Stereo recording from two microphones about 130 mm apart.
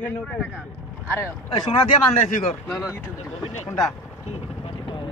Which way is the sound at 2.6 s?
Centre (ahead or behind).